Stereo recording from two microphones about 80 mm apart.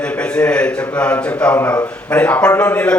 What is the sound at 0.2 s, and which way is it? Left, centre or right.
A man's voice, centre.